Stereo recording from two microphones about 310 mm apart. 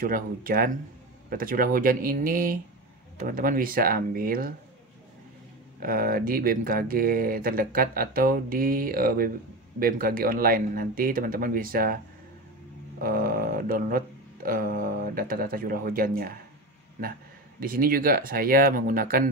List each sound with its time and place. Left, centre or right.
0.0 s speech: right
5.8 s speech: right
13.0 s speech: right
17.6 s speech: right